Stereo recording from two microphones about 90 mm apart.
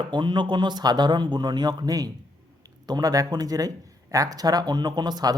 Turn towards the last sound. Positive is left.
turn(degrees=-50)  # may be behind; listen again after turning